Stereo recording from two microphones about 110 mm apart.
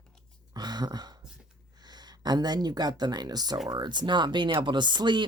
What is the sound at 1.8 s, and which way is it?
A woman's voice, 40° right (ahead or behind).